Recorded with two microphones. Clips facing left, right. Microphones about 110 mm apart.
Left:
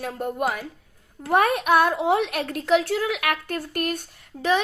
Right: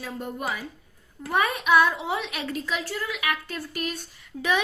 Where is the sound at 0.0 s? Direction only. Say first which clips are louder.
Left 6 dB; 50° left (ahead or behind).